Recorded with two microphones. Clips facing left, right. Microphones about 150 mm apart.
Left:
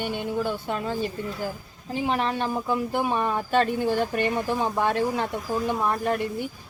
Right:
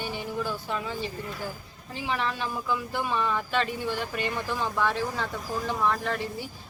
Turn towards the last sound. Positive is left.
turn(degrees=55)  # may be behind; listen again after turning